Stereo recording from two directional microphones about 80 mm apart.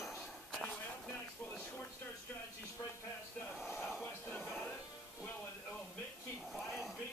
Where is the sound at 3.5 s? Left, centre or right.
Centre.